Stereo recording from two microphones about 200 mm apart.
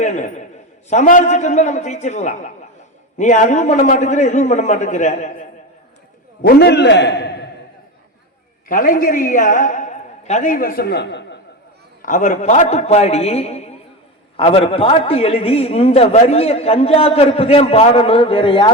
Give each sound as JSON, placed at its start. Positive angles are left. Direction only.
{"t": 0.0, "sound": "a man's voice", "side_deg": 35}
{"t": 6.4, "sound": "a man's voice", "side_deg": 55}
{"t": 8.6, "sound": "a woman's voice", "side_deg": 45}
{"t": 12.0, "sound": "a man's voice", "side_deg": 40}